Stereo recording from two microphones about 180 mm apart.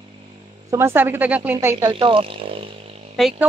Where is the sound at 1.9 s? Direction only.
30° right (ahead or behind).